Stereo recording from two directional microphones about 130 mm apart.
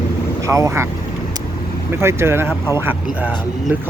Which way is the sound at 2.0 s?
20° right (ahead or behind).